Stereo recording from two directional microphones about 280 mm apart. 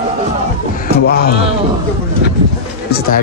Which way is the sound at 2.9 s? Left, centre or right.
Left.